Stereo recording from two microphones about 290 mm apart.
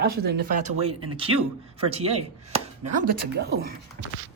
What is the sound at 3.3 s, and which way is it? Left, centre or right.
Speech, right.